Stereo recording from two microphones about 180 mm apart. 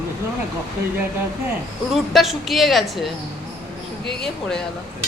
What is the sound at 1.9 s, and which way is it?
A woman's voice, centre (ahead or behind).